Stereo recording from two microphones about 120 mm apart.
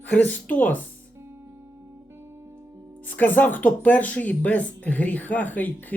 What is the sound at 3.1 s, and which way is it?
Speech, 15° left (ahead or behind).